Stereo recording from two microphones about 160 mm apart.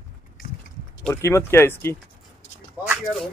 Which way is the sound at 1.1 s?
15° left (ahead or behind).